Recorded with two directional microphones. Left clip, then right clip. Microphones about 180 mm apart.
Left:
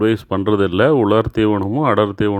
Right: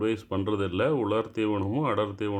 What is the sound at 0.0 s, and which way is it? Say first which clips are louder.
Speech: left 11 dB; 40° left (ahead or behind).